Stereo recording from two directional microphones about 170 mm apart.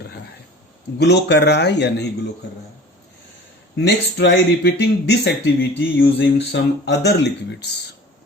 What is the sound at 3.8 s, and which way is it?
Speech, 90° left.